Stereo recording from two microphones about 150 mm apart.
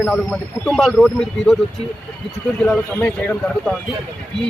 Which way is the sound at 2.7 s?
5° left (ahead or behind).